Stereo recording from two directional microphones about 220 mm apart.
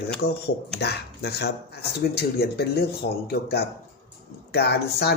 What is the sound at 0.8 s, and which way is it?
Speech, 50° left (ahead or behind).